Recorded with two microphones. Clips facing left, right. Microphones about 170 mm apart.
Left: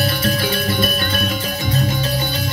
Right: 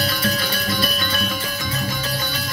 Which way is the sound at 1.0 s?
50° left (ahead or behind).